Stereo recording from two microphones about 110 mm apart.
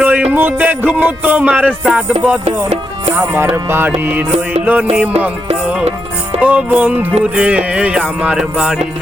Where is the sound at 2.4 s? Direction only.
80° right.